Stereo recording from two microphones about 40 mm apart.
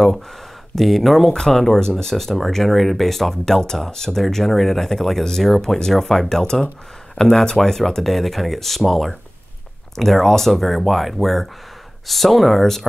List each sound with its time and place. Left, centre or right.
0.7 s speech: centre